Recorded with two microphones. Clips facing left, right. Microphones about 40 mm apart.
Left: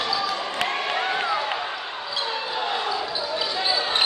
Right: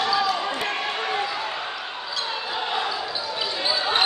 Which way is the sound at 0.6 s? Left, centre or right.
Centre.